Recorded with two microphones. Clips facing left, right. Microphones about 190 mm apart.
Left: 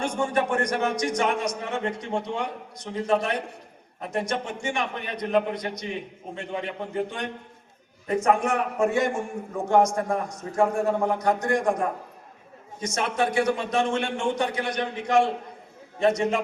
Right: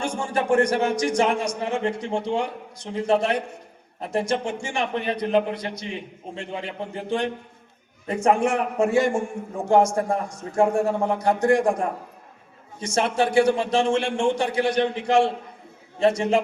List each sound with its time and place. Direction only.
0.0 s a man's voice: 30° right (ahead or behind)